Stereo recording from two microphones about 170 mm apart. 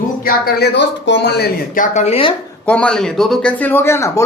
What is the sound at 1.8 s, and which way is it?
Speech, 40° left (ahead or behind).